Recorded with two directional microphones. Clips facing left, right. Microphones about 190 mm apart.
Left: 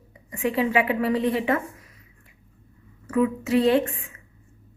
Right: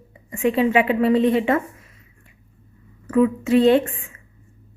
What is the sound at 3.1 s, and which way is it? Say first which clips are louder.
Speech: right 5 dB; 30° right (ahead or behind).